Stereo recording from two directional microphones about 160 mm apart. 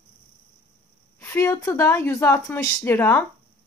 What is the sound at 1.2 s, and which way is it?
Speech, 15° left (ahead or behind).